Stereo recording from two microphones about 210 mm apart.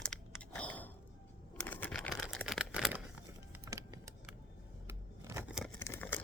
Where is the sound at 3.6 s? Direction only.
15° right (ahead or behind).